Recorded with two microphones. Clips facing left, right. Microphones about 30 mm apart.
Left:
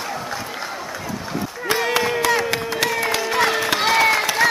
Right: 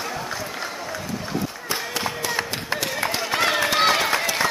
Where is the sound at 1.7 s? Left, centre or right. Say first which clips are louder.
Left 9 dB; left.